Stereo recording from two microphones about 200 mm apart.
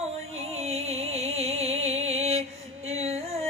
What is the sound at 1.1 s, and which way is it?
Music, 30° right (ahead or behind).